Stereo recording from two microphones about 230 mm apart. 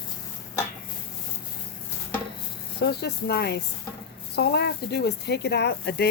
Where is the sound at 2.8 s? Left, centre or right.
Left.